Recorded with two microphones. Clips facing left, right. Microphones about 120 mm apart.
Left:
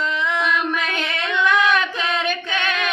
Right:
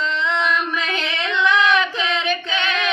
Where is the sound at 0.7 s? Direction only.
50° left (ahead or behind).